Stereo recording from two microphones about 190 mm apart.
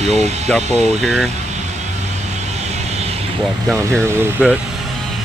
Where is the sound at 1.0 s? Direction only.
Centre (ahead or behind).